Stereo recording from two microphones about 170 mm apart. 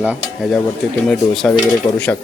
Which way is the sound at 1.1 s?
5° left (ahead or behind).